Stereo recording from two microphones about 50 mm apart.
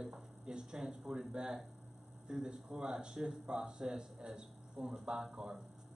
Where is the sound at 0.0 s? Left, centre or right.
Centre.